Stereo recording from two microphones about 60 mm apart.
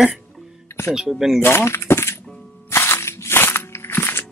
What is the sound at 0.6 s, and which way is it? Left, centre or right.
Music, left.